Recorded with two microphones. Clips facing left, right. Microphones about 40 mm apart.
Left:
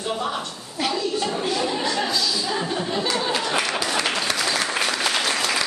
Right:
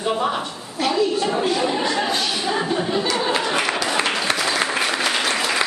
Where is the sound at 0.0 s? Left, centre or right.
Centre.